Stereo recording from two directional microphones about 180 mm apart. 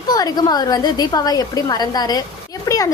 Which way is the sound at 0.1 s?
20° left (ahead or behind).